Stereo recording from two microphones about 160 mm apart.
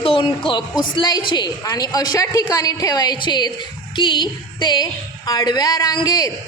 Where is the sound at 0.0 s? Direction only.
35° left (ahead or behind).